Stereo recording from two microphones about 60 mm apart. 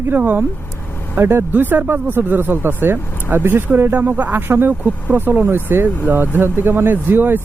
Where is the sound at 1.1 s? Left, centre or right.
Right.